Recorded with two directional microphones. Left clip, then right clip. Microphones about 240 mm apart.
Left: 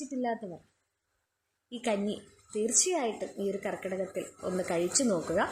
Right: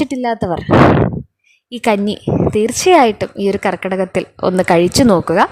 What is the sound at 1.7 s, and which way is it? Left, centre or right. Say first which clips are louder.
Speech: right 16 dB; right.